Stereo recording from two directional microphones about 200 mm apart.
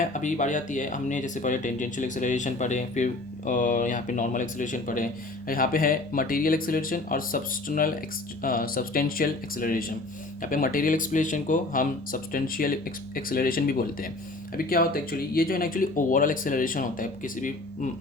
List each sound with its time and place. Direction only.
0.0 s speech: 40° left (ahead or behind)